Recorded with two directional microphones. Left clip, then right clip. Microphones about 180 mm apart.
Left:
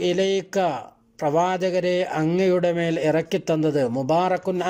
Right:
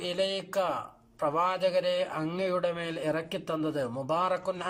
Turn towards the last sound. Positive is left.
turn(degrees=35)  # may be behind; listen again after turning